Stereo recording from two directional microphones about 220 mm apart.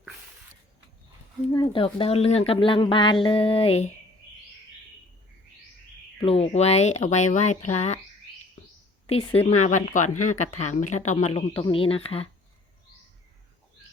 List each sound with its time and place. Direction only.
1.5 s a woman's voice: 25° left (ahead or behind)
6.1 s speech: 25° left (ahead or behind)
9.5 s a woman's voice: 35° left (ahead or behind)